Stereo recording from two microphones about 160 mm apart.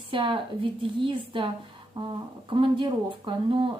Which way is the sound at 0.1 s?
30° right (ahead or behind).